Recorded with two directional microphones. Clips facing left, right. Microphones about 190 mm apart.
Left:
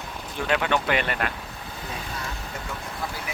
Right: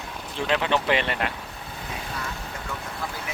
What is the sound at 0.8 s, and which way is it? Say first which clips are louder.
Speech: right 1 dB; 25° right (ahead or behind).